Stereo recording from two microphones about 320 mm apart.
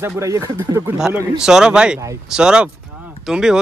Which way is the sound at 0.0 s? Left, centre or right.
Centre.